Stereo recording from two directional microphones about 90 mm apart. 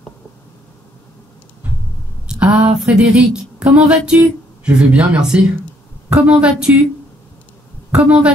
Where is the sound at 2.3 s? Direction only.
15° right (ahead or behind).